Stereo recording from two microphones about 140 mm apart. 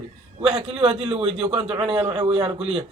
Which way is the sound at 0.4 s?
40° right (ahead or behind).